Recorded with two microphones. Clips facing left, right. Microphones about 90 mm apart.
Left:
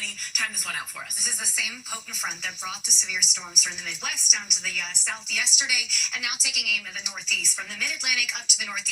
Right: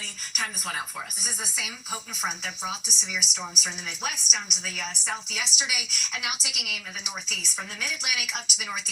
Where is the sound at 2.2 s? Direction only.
25° right (ahead or behind).